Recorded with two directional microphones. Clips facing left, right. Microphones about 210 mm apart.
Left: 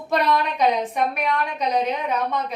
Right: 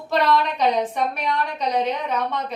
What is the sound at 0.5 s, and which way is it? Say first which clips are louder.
A woman's voice: even; 10° left (ahead or behind).